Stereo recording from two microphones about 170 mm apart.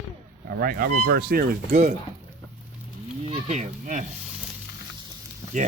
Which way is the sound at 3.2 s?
40° right (ahead or behind).